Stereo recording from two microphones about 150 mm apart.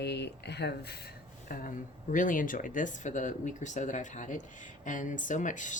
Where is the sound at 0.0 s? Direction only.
90° left.